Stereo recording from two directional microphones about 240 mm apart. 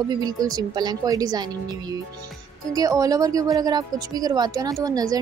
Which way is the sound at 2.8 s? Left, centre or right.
Centre.